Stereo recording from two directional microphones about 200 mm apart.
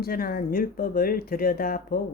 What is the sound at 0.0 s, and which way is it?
Speech, 50° left (ahead or behind).